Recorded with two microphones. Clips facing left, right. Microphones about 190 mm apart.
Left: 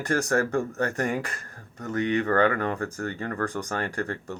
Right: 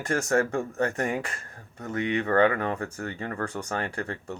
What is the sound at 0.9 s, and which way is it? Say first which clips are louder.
Speech: left 1 dB; 35° right (ahead or behind).